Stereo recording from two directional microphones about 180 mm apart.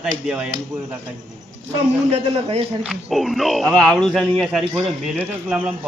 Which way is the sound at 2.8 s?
Centre (ahead or behind).